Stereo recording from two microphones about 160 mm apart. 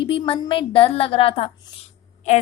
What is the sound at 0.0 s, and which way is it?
A woman's voice, 35° left (ahead or behind).